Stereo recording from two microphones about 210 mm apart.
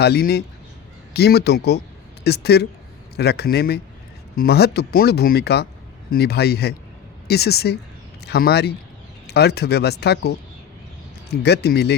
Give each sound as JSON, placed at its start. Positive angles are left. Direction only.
{"t": 0.0, "sound": "speech", "side_deg": 50}